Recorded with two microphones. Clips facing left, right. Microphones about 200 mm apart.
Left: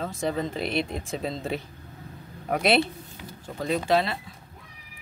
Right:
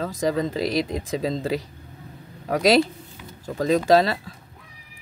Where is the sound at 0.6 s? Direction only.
35° right (ahead or behind).